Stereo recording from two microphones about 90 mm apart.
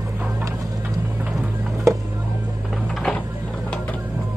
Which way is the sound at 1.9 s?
35° right (ahead or behind).